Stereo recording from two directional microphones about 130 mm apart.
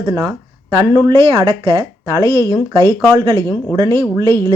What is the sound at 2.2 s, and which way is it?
Speech, 25° left (ahead or behind).